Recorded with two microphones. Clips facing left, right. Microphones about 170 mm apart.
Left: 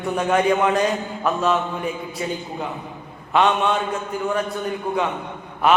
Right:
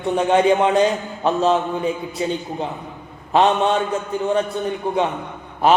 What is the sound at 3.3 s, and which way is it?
Speech, 35° right (ahead or behind).